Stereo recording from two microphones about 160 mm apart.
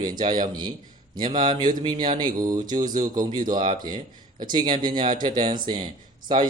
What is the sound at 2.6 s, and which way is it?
Speech, 55° right (ahead or behind).